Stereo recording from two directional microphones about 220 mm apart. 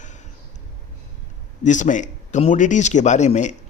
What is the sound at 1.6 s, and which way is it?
Speech, 35° left (ahead or behind).